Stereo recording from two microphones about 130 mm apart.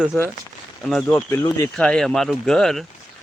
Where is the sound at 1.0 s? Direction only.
15° left (ahead or behind).